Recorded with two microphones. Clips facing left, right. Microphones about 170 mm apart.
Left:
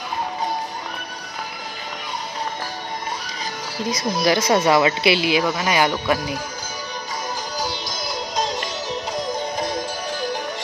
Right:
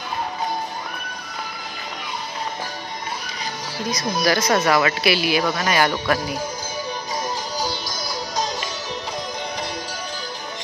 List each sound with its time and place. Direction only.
3.9 s speech: 25° left (ahead or behind)